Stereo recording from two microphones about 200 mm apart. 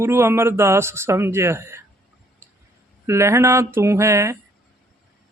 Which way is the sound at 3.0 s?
15° right (ahead or behind).